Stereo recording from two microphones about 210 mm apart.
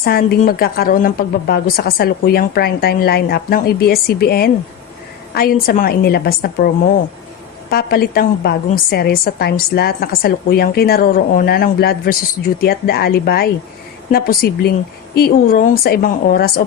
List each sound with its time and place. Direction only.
0.0 s a woman's voice: 45° left (ahead or behind)
7.7 s a woman's voice: 50° left (ahead or behind)